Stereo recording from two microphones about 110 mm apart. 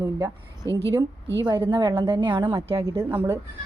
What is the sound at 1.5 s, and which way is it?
Speech, 30° right (ahead or behind).